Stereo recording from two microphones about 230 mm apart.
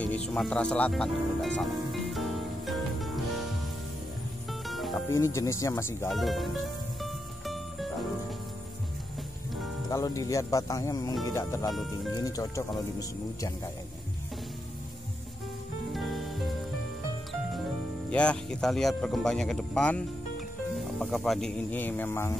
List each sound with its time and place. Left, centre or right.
0.0 s music: centre
4.5 s music: centre
5.1 s speech: centre
6.0 s speech: centre
7.0 s music: centre
9.8 s speech: centre
11.7 s speech: centre
12.2 s speech: centre
15.9 s music: centre
18.1 s speech: centre